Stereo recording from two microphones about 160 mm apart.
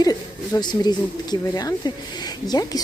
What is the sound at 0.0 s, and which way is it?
Speech, 25° left (ahead or behind).